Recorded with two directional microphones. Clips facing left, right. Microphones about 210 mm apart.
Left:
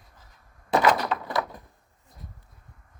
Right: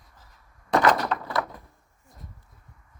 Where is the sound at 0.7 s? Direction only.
5° left (ahead or behind).